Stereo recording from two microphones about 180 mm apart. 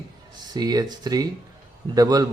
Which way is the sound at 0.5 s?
20° right (ahead or behind).